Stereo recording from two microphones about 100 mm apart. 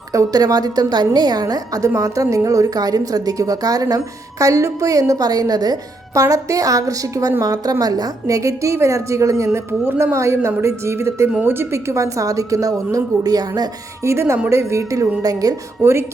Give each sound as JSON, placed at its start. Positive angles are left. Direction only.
{"t": 0.1, "sound": "a woman's voice", "side_deg": -35}
{"t": 14.0, "sound": "a woman's voice", "side_deg": -30}
{"t": 15.8, "sound": "speech", "side_deg": -25}